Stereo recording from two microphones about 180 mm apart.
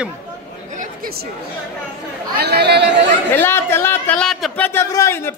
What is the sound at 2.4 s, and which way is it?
Speech, 65° right (ahead or behind).